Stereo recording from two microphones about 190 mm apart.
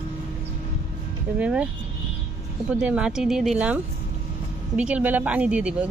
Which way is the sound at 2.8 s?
5° right (ahead or behind).